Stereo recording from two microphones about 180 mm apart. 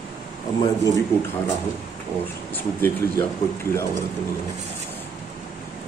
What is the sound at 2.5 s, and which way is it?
Speech, 15° left (ahead or behind).